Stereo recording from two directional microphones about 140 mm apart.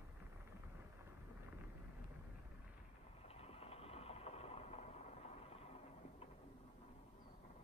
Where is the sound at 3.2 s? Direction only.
45° left (ahead or behind).